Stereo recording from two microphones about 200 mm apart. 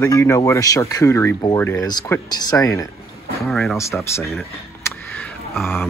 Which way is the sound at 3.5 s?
Centre (ahead or behind).